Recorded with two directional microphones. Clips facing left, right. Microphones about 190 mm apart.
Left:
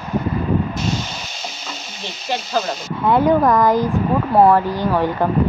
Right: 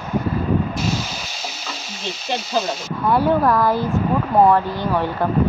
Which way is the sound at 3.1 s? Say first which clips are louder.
Left 2 dB; 20° left (ahead or behind).